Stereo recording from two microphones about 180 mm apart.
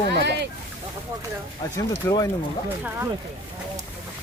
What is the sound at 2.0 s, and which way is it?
Speech, 15° left (ahead or behind).